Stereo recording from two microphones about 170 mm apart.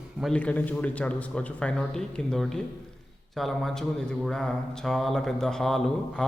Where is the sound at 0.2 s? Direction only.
5° left (ahead or behind).